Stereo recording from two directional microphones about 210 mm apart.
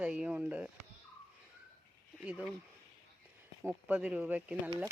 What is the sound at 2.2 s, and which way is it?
Speech, 5° right (ahead or behind).